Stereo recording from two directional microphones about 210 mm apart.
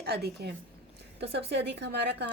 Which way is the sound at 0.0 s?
50° right (ahead or behind).